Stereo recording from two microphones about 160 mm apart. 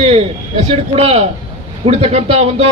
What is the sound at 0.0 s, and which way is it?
A man's voice, 40° right (ahead or behind).